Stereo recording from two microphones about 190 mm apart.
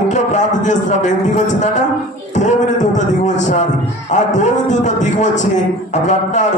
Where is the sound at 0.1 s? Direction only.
40° left (ahead or behind).